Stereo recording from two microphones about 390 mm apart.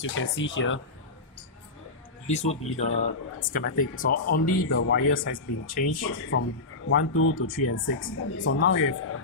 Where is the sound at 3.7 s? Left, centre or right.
Left.